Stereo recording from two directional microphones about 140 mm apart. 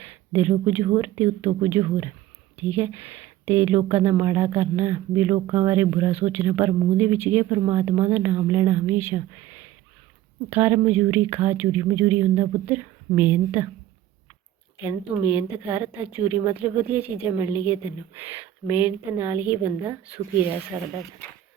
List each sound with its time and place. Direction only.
0.0 s a sound: 15° right (ahead or behind)
0.6 s speech: 25° right (ahead or behind)
6.1 s speech: 15° right (ahead or behind)
15.1 s speech: 10° right (ahead or behind)